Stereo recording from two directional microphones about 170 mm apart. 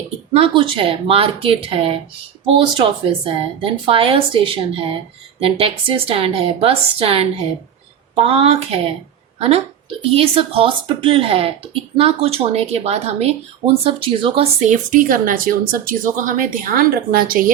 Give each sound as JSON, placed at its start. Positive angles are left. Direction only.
{"t": 0.3, "sound": "speech", "side_deg": -30}
{"t": 10.2, "sound": "speech", "side_deg": -35}
{"t": 14.7, "sound": "a woman's voice", "side_deg": -50}